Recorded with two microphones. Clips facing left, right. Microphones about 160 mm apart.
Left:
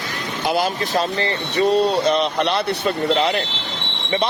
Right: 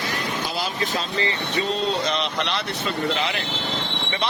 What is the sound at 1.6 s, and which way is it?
Speech, 70° left (ahead or behind).